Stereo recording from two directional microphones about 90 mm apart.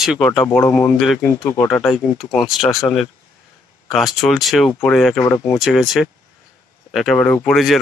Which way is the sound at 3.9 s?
Centre (ahead or behind).